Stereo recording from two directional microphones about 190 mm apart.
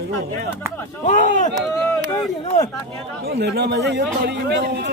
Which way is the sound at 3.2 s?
60° right (ahead or behind).